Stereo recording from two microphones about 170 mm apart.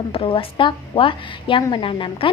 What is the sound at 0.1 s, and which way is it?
A woman's voice, 30° left (ahead or behind).